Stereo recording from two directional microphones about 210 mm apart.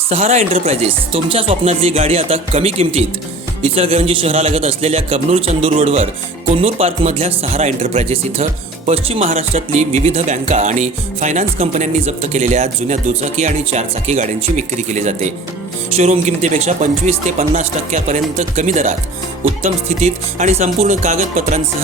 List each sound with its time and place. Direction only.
0.1 s speech: 30° right (ahead or behind)